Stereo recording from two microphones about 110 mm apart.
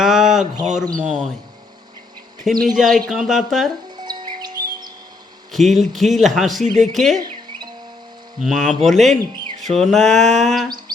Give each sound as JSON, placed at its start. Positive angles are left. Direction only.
{"t": 0.0, "sound": "a sound", "side_deg": -5}
{"t": 0.9, "sound": "speech", "side_deg": -10}
{"t": 2.4, "sound": "speech", "side_deg": 0}
{"t": 3.9, "sound": "music", "side_deg": -40}
{"t": 5.5, "sound": "speech", "side_deg": 0}
{"t": 7.2, "sound": "bird", "side_deg": -40}
{"t": 8.4, "sound": "speech", "side_deg": -5}
{"t": 9.6, "sound": "music", "side_deg": 0}